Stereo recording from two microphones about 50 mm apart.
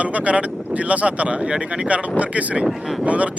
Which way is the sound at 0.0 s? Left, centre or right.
Right.